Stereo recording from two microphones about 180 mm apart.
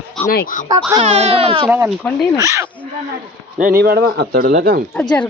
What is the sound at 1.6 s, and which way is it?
Speech, 10° right (ahead or behind).